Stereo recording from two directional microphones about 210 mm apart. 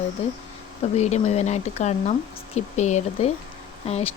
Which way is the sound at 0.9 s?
30° left (ahead or behind).